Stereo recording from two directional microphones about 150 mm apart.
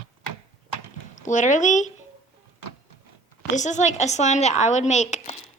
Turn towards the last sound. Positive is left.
turn(degrees=50)  # may be behind; listen again after turning